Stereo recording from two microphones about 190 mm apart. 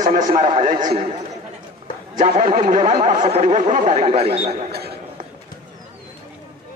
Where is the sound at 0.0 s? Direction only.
45° right (ahead or behind).